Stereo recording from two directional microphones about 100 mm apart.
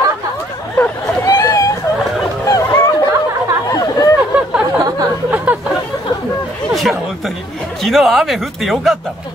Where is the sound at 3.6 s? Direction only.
35° left (ahead or behind).